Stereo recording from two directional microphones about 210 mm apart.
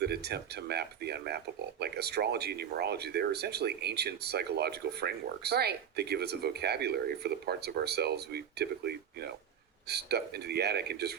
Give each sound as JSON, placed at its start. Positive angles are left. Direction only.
{"t": 0.0, "sound": "speech", "side_deg": -50}